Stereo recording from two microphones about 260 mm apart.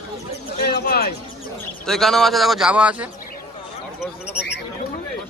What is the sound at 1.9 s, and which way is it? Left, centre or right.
A man's voice, centre.